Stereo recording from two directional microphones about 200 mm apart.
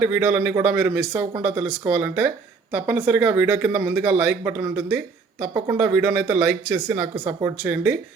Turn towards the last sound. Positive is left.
turn(degrees=-5)  # may be behind; listen again after turning